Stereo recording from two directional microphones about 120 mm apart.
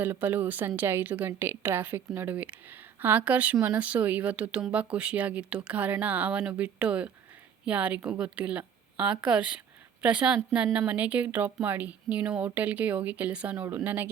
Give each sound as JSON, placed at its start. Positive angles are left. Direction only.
{"t": 0.0, "sound": "speech", "side_deg": -15}